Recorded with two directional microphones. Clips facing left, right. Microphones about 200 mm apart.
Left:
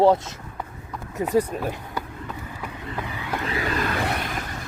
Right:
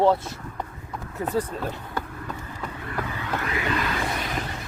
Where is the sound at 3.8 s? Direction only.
55° left (ahead or behind).